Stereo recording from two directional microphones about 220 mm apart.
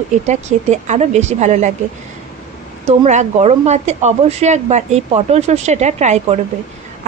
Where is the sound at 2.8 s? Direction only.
30° right (ahead or behind).